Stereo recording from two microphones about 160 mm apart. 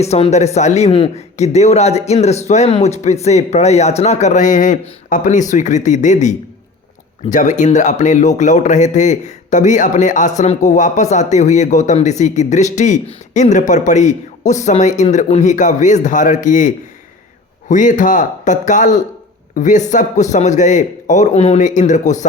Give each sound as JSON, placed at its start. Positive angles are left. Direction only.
{"t": 0.0, "sound": "speech", "side_deg": 40}